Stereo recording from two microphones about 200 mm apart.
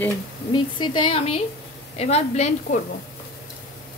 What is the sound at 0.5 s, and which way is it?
A woman's voice, 25° left (ahead or behind).